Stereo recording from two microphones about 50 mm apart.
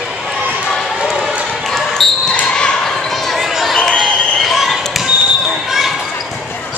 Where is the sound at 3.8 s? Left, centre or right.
Centre.